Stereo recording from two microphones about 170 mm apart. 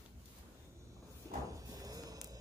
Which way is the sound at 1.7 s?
20° right (ahead or behind).